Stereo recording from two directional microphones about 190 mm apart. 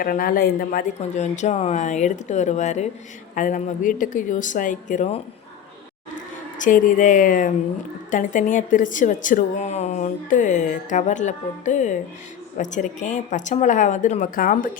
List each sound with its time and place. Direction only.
0.0 s a woman's voice: 45° left (ahead or behind)
6.6 s a woman's voice: 45° left (ahead or behind)